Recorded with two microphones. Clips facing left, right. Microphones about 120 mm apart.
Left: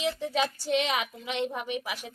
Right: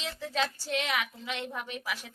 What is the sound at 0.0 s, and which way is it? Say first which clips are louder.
A woman's voice: left 4 dB; 15° left (ahead or behind).